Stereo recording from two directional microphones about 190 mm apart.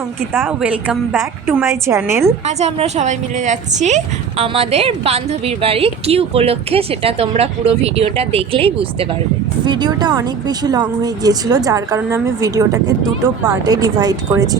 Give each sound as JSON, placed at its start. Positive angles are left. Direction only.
{"t": 0.3, "sound": "a woman's voice", "side_deg": -10}
{"t": 2.6, "sound": "a woman's voice", "side_deg": -35}